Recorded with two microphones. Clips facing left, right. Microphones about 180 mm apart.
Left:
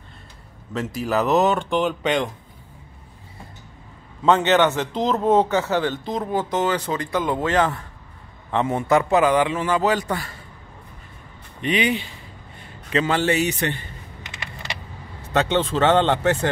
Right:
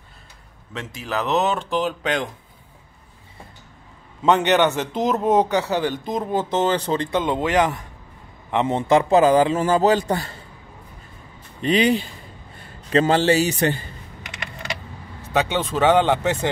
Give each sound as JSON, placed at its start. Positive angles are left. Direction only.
{"t": 1.0, "sound": "speech", "side_deg": 5}
{"t": 4.2, "sound": "a man's voice", "side_deg": -15}
{"t": 11.6, "sound": "a man's voice", "side_deg": -35}
{"t": 15.3, "sound": "a man's voice", "side_deg": -10}